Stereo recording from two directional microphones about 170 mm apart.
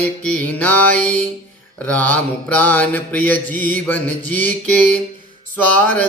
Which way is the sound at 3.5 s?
50° right (ahead or behind).